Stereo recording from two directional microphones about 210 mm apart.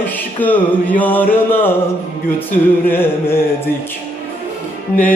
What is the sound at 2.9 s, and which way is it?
Music, 10° left (ahead or behind).